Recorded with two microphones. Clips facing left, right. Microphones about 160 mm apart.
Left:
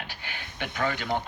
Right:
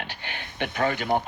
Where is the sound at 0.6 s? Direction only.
45° right (ahead or behind).